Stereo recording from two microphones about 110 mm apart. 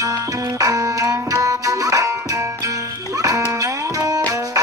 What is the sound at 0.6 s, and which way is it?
Music, 35° right (ahead or behind).